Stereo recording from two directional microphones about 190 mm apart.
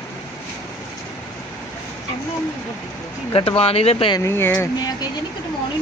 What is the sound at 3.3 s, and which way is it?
Speech, 30° left (ahead or behind).